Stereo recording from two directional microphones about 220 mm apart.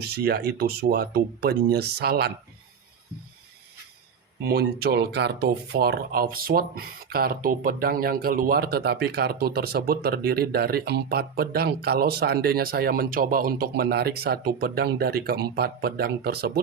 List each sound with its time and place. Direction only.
0.0 s speech: 45° right (ahead or behind)
4.4 s speech: 45° right (ahead or behind)